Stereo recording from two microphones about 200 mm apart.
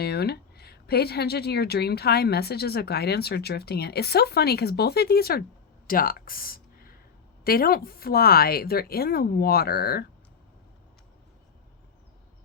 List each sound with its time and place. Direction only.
0.0 s speech: 55° left (ahead or behind)